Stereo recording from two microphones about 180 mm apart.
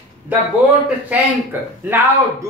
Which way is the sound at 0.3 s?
10° right (ahead or behind).